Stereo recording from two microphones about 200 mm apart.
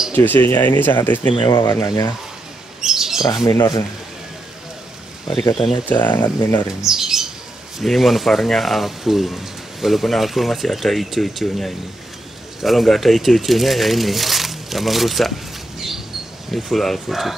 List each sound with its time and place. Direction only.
0.1 s speech: 10° left (ahead or behind)
1.2 s speech: 25° left (ahead or behind)
2.8 s bird: centre (ahead or behind)
3.4 s speech: 20° left (ahead or behind)
5.3 s speech: 20° left (ahead or behind)
6.8 s speech: centre (ahead or behind)
16.5 s speech: centre (ahead or behind)